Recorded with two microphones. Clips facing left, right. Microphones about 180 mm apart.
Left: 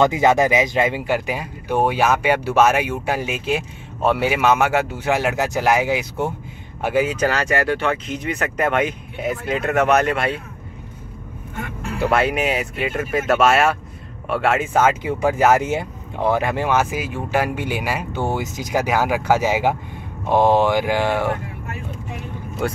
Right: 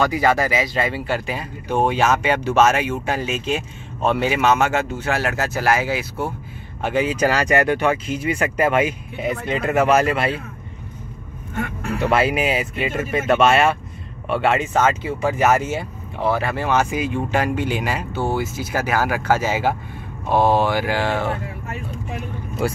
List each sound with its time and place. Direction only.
0.0 s speech: 20° left (ahead or behind)
6.8 s speech: 5° left (ahead or behind)
7.2 s speech: 10° right (ahead or behind)
12.0 s speech: centre (ahead or behind); by 21.4 s 15° left (ahead or behind)
22.6 s speech: 5° right (ahead or behind)